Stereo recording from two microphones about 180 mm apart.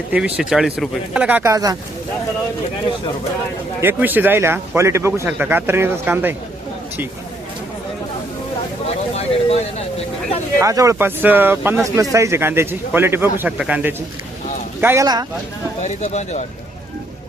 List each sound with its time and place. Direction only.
0.1 s a man's voice: 5° right (ahead or behind)
3.8 s a man's voice: 10° right (ahead or behind)
8.9 s speech: 35° left (ahead or behind)
10.6 s a man's voice: 15° right (ahead or behind)
15.8 s speech: 40° left (ahead or behind)